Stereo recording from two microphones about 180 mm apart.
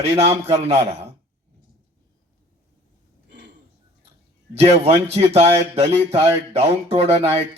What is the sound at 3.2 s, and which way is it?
Roaring cats, 70° right (ahead or behind).